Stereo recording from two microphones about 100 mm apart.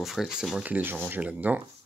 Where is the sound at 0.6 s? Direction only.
20° right (ahead or behind).